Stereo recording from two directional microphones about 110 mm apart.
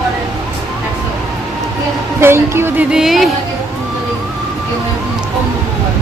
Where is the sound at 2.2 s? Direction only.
25° right (ahead or behind).